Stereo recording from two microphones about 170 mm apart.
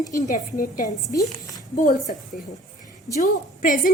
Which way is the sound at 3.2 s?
50° left (ahead or behind).